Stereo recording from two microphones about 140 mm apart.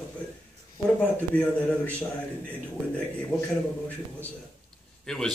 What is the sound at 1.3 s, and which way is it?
Speech, 10° left (ahead or behind).